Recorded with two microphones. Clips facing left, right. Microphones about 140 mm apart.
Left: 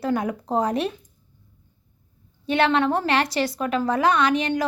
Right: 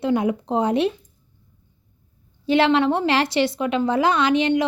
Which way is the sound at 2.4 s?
25° right (ahead or behind).